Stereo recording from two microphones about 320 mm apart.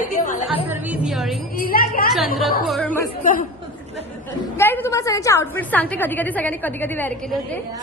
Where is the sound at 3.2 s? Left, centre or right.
Left.